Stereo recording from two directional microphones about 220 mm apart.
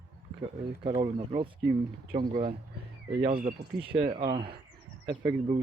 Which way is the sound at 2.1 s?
35° right (ahead or behind).